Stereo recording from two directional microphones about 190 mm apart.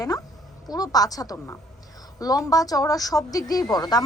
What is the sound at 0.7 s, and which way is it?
A woman's voice, 20° left (ahead or behind).